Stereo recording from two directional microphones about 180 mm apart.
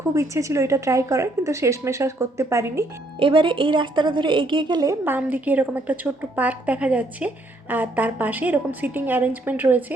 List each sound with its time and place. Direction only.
0.1 s speech: 15° right (ahead or behind)
3.2 s a woman's voice: 30° right (ahead or behind); by 9.8 s 10° right (ahead or behind)